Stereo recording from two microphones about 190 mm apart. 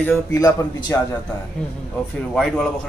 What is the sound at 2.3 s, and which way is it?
Speech, centre (ahead or behind).